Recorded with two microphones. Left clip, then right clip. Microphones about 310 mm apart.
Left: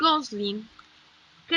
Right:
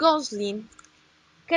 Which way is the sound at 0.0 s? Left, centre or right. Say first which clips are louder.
Right 2 dB; centre.